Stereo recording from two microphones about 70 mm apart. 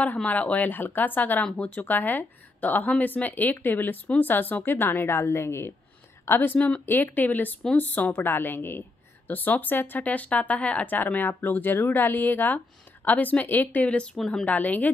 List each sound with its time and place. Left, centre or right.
0.0 s a woman's voice: left
14.1 s a woman's voice: centre
14.4 s speech: left